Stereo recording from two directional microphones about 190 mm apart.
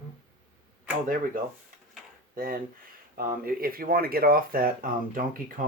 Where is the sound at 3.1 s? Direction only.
50° right (ahead or behind).